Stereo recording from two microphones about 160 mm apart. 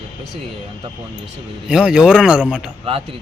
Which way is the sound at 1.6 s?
5° right (ahead or behind).